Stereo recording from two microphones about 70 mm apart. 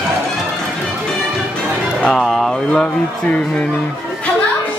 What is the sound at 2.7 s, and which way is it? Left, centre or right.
Speech, centre.